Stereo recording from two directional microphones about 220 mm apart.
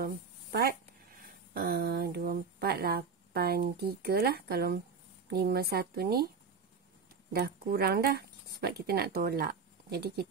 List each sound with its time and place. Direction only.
0.0 s a sound: 45° right (ahead or behind)
5.3 s a woman's voice: 45° right (ahead or behind)
7.3 s speech: 45° right (ahead or behind)